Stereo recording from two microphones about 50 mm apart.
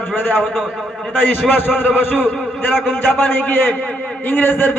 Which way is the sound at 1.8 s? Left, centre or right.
Left.